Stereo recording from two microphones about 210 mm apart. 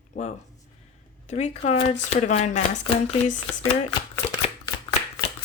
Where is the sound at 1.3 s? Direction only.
30° left (ahead or behind).